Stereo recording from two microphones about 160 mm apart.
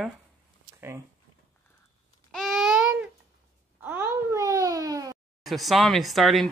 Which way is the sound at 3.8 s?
10° right (ahead or behind).